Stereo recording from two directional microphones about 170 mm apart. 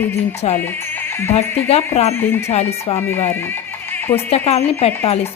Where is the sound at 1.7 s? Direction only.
40° left (ahead or behind).